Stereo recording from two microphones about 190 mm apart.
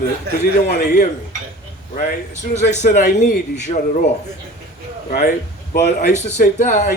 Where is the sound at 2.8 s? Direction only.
40° left (ahead or behind).